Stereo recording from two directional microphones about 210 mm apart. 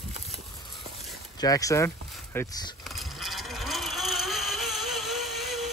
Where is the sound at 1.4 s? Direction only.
15° left (ahead or behind).